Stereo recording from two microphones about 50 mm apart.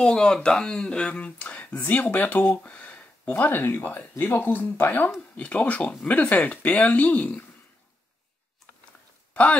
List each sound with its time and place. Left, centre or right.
0.0 s speech: centre; by 2.6 s left
2.6 s a sound: left
3.3 s speech: left
5.4 s speech: left
9.3 s speech: left